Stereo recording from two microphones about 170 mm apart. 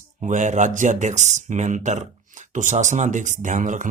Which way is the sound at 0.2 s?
45° right (ahead or behind).